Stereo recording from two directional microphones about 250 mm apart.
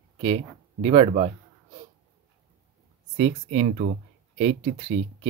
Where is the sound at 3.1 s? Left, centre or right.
Right.